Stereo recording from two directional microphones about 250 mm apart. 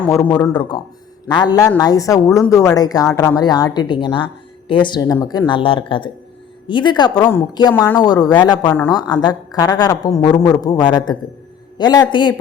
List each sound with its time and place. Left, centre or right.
0.0 s a woman's voice: centre